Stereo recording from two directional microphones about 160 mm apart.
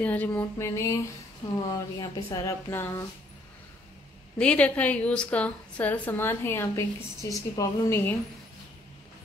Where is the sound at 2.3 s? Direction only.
15° left (ahead or behind).